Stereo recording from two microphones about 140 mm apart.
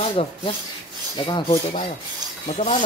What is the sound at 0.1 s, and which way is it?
Speech, 40° left (ahead or behind).